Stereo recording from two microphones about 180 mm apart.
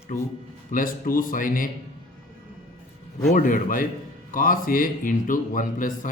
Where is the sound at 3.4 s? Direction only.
50° left (ahead or behind).